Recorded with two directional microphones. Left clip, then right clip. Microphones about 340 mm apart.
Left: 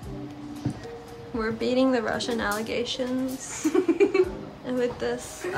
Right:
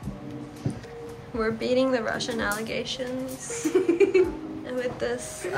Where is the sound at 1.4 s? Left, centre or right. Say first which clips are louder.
Even; centre.